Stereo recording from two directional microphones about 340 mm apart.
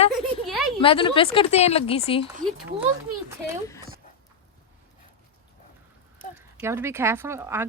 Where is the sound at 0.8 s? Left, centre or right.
Centre.